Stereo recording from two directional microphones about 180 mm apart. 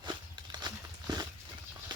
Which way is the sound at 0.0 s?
25° right (ahead or behind).